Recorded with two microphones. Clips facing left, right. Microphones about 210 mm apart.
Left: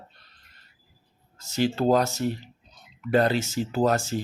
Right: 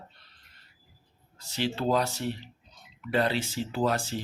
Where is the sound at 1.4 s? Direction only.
45° left (ahead or behind).